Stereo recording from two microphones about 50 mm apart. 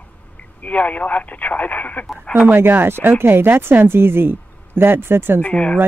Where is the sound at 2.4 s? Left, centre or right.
Right.